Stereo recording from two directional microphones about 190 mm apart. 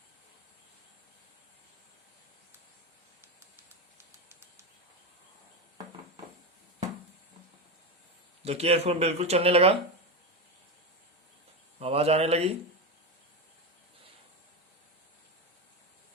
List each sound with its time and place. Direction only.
3.9 s a sound: 15° right (ahead or behind)
8.4 s speech: 30° right (ahead or behind)
11.8 s speech: 30° right (ahead or behind)